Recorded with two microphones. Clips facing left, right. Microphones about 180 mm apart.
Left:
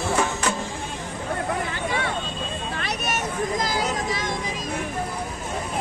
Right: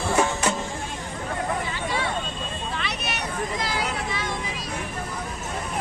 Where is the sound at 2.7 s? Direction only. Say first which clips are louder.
Left 5 dB; 45° left (ahead or behind).